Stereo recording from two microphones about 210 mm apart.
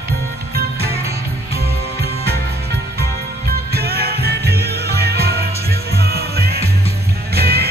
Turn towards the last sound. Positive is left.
turn(degrees=-50)  # may be behind; listen again after turning